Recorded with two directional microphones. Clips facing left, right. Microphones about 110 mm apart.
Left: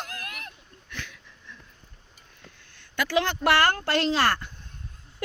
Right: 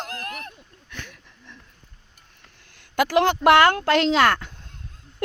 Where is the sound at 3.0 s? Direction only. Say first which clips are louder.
Right 6 dB; 55° right (ahead or behind).